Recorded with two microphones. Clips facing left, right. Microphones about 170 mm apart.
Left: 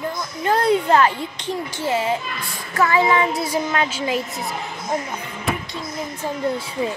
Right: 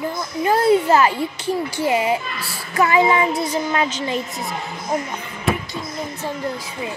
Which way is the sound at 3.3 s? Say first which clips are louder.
Right 1 dB; centre (ahead or behind).